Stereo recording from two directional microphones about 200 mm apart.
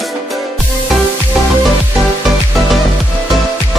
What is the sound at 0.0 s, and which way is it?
Music, centre (ahead or behind).